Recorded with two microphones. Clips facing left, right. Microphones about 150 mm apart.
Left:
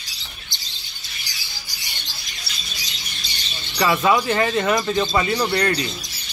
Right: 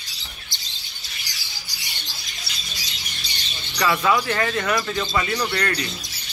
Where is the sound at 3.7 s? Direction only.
20° left (ahead or behind).